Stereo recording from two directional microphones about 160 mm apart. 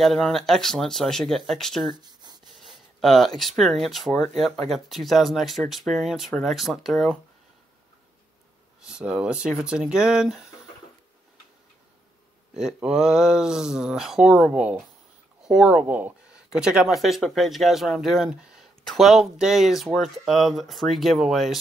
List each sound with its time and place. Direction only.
0.0 s speech: centre (ahead or behind)
2.0 s a sound: 25° right (ahead or behind)
2.6 s a sound: centre (ahead or behind)
3.3 s speech: centre (ahead or behind)
8.8 s speech: 5° right (ahead or behind)
12.5 s speech: 5° right (ahead or behind)